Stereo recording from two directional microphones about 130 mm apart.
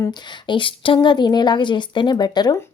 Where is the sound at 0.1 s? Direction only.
40° left (ahead or behind).